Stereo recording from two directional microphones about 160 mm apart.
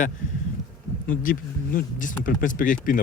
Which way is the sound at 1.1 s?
60° left (ahead or behind).